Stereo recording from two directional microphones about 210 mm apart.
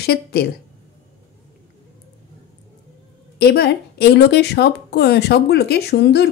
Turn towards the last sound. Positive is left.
turn(degrees=55)  # may be behind; listen again after turning